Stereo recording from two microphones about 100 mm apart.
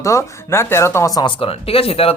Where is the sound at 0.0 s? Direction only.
30° left (ahead or behind).